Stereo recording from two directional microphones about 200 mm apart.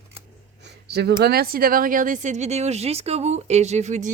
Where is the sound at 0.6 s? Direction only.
55° right (ahead or behind).